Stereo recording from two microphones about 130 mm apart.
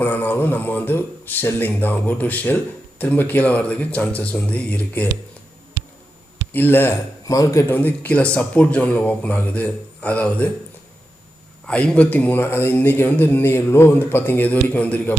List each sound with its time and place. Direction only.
0.0 s speech: 15° left (ahead or behind)
6.5 s speech: 15° left (ahead or behind)
11.6 s speech: 5° left (ahead or behind)